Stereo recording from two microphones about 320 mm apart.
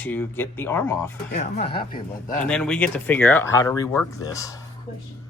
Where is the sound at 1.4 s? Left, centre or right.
Centre.